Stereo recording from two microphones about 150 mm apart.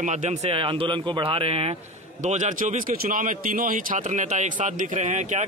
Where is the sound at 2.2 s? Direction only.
55° right (ahead or behind).